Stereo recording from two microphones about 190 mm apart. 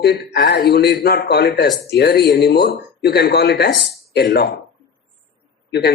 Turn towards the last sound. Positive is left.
turn(degrees=55)  # may be behind; listen again after turning